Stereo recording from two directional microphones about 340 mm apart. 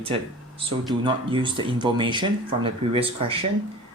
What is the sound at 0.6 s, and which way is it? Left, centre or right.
Speech, centre.